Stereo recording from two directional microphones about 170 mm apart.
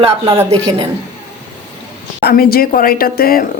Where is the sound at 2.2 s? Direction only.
60° left (ahead or behind).